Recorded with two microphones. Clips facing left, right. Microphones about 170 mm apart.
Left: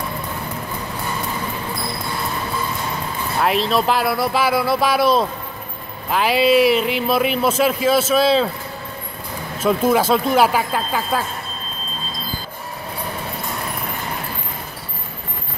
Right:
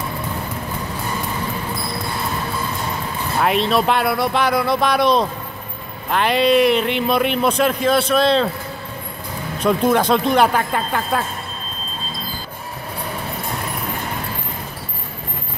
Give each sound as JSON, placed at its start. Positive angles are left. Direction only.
{"t": 3.3, "sound": "a man's voice", "side_deg": 0}
{"t": 9.6, "sound": "a man's voice", "side_deg": 5}